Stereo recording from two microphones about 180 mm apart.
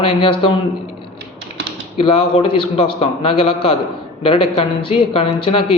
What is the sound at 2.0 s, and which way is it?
Speech, 30° left (ahead or behind).